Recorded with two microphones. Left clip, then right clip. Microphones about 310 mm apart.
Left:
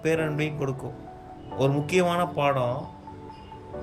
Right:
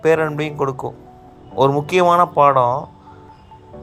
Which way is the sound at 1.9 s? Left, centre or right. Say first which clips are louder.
Right 11 dB; centre.